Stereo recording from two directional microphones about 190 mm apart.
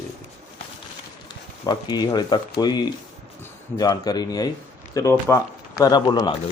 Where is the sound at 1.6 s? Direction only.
20° left (ahead or behind).